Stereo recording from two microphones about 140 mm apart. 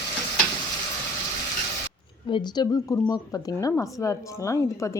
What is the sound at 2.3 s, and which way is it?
A woman's voice, 30° left (ahead or behind).